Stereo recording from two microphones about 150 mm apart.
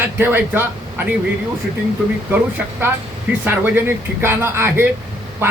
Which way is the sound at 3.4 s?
15° right (ahead or behind).